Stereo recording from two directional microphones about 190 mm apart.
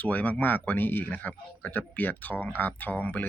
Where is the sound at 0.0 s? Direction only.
10° left (ahead or behind).